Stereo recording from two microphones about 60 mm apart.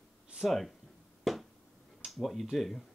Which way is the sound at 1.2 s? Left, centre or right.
Centre.